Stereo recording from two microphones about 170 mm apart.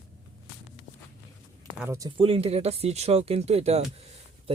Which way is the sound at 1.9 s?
20° right (ahead or behind).